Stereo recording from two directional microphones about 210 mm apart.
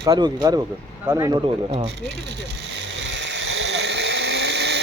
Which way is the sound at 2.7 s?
60° right (ahead or behind).